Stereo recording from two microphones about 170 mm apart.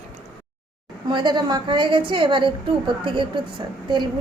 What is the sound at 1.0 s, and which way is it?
A woman's voice, 25° right (ahead or behind).